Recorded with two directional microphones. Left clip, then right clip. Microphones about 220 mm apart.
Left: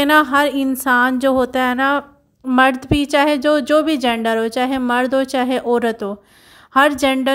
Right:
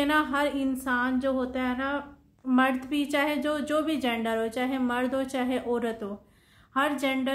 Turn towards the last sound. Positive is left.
turn(degrees=45)  # may be behind; listen again after turning